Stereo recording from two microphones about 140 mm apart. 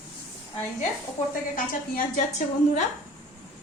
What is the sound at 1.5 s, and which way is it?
Speech, 75° left (ahead or behind).